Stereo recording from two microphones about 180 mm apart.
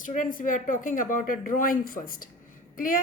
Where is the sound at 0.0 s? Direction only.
45° left (ahead or behind).